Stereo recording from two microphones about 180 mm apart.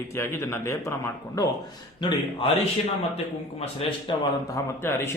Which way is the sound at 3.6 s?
30° left (ahead or behind).